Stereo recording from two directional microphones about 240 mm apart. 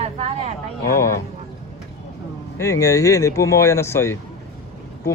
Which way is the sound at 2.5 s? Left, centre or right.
Centre.